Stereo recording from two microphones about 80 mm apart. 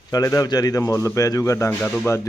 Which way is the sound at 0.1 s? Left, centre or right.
Left.